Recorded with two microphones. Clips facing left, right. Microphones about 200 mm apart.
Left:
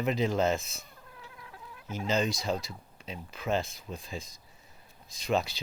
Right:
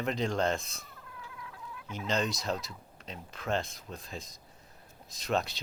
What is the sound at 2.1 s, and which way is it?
Speech, centre (ahead or behind).